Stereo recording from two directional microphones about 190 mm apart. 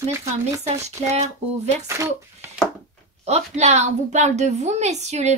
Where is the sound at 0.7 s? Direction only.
35° right (ahead or behind).